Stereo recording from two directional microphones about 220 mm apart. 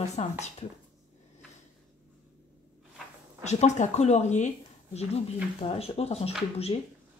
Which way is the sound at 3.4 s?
30° left (ahead or behind).